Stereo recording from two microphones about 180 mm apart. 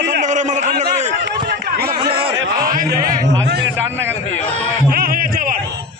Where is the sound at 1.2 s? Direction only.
75° right (ahead or behind).